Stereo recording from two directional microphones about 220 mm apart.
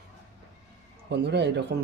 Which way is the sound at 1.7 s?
50° right (ahead or behind).